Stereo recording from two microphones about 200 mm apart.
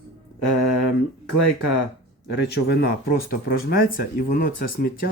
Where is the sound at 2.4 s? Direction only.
55° left (ahead or behind).